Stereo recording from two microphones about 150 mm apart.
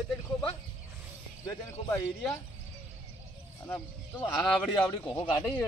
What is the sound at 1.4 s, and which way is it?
Speech, 15° left (ahead or behind).